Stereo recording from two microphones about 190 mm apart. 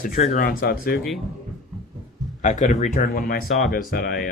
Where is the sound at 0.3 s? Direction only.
50° left (ahead or behind).